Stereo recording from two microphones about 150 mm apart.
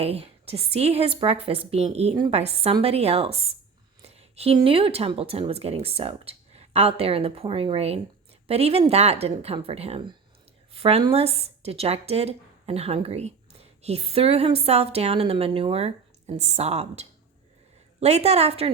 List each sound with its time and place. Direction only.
0.0 s speech: 40° right (ahead or behind)
4.1 s a sound: 45° right (ahead or behind)
4.5 s a woman's voice: 35° right (ahead or behind)